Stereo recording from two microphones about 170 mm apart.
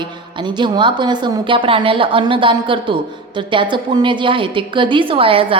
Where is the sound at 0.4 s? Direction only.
30° right (ahead or behind).